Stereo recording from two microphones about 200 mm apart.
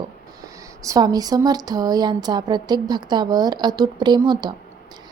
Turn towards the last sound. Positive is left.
turn(degrees=-20)  # may be behind; listen again after turning